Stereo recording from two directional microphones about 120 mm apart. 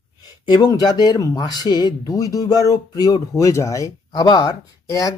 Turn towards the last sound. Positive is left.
turn(degrees=30)  # may be behind; listen again after turning